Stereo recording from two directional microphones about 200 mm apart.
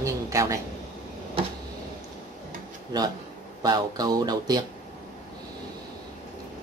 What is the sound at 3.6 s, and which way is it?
Speech, 20° right (ahead or behind).